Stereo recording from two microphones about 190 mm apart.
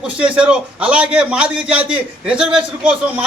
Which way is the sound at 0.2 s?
5° right (ahead or behind).